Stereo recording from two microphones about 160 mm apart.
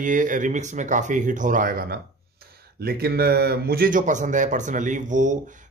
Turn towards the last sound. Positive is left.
turn(degrees=-50)  # may be behind; listen again after turning